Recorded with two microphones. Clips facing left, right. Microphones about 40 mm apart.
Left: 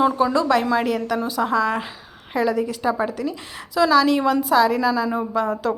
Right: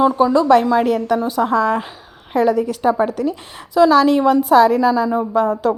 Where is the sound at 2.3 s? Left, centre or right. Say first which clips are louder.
Right 5 dB; right.